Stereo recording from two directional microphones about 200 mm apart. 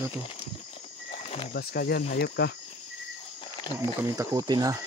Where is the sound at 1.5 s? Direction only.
55° left (ahead or behind).